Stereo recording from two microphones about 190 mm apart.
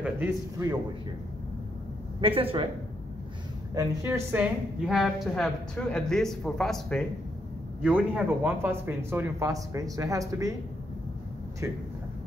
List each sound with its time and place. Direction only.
0.0 s a man's voice: 15° right (ahead or behind)
2.1 s speech: 30° right (ahead or behind)
3.7 s a woman's voice: 15° right (ahead or behind)
11.6 s speech: 15° right (ahead or behind)